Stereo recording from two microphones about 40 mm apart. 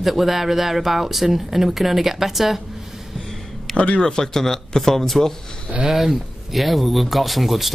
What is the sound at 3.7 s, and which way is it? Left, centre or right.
Speech, left.